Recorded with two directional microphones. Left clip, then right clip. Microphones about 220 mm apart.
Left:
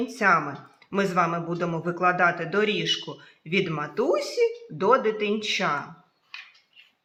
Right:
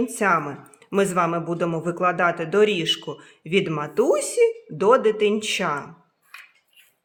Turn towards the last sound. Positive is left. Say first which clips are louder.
# right 2 dB
turn(degrees=-45)  # may be behind; listen again after turning